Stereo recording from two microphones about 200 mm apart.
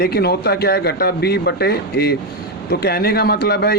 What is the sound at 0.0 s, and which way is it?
A man's voice, 50° left (ahead or behind).